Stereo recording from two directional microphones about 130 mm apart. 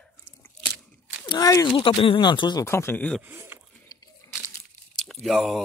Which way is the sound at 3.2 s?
15° right (ahead or behind).